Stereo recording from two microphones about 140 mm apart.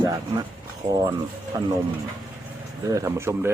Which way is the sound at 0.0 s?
30° right (ahead or behind).